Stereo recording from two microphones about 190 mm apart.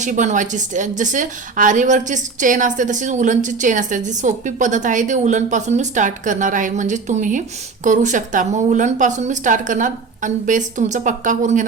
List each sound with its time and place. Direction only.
0.0 s a woman's voice: 40° right (ahead or behind)